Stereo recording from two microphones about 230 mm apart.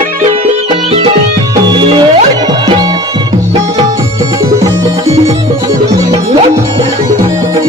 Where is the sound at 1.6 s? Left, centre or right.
Centre.